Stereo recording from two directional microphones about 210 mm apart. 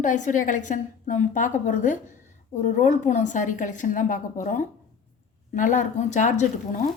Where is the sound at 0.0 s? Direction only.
35° left (ahead or behind).